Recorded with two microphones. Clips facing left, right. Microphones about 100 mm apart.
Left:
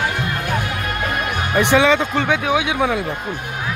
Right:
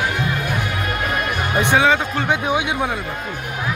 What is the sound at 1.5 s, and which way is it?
Music, 85° left.